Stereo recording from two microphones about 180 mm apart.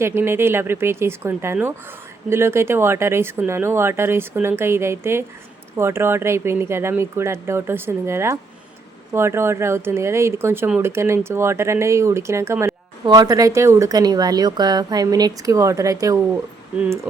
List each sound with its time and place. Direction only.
0.0 s a woman's voice: 15° right (ahead or behind)